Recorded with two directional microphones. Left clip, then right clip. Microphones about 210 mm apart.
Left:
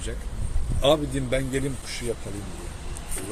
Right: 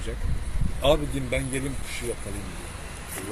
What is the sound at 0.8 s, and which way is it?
Speech, 30° left (ahead or behind).